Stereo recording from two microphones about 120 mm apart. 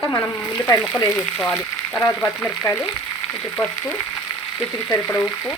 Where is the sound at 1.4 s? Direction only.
10° left (ahead or behind).